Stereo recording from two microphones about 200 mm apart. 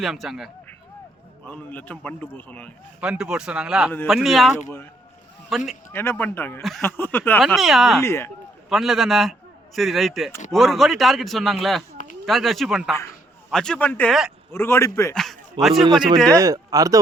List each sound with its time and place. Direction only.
0.0 s a man's voice: centre (ahead or behind)
3.0 s a man's voice: 5° right (ahead or behind)
5.9 s a man's voice: 10° left (ahead or behind)
7.4 s a man's voice: centre (ahead or behind)
8.0 s a man's voice: 10° left (ahead or behind)
8.7 s a man's voice: centre (ahead or behind)
14.5 s a man's voice: 10° left (ahead or behind)
15.1 s a man's voice: centre (ahead or behind)
15.9 s speech: 25° right (ahead or behind)